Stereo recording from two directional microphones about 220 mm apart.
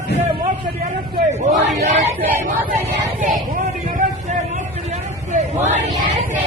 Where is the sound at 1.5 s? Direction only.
40° right (ahead or behind).